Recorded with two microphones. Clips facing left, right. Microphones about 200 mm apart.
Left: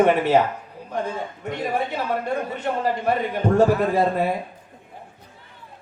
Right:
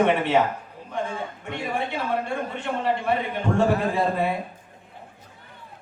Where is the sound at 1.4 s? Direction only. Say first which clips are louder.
Left 4 dB; 40° left (ahead or behind).